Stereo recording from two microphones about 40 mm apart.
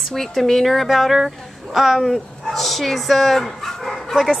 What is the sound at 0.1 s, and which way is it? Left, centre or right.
A woman's voice, centre.